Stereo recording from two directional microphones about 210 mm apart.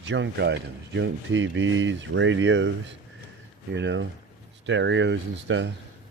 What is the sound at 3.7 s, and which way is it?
Speech, 60° right (ahead or behind).